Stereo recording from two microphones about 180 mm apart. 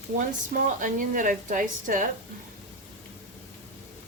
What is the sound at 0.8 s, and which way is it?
Speech, 50° right (ahead or behind).